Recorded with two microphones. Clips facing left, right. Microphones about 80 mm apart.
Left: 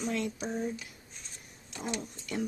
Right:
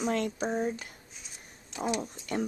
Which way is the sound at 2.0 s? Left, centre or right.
Right.